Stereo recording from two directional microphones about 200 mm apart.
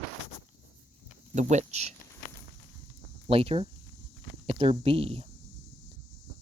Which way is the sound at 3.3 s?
30° right (ahead or behind).